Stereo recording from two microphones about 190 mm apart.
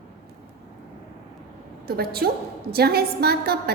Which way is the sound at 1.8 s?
55° right (ahead or behind).